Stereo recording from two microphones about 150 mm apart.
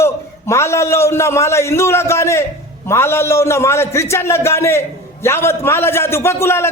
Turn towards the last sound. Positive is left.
turn(degrees=15)  # may be behind; listen again after turning